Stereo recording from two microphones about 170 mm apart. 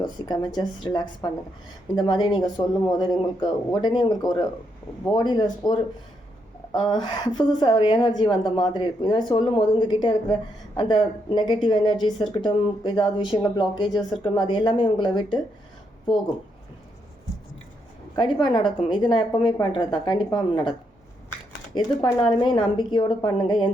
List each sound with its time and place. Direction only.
0.0 s a woman's voice: 25° left (ahead or behind)
18.2 s a woman's voice: 25° left (ahead or behind)
21.8 s a woman's voice: 25° left (ahead or behind)